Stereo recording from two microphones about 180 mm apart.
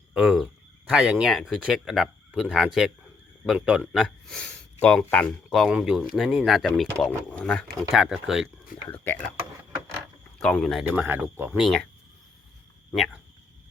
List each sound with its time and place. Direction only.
0.1 s speech: 5° right (ahead or behind)
8.9 s speech: 10° left (ahead or behind)
10.3 s speech: 5° left (ahead or behind)
11.6 s speech: 5° left (ahead or behind)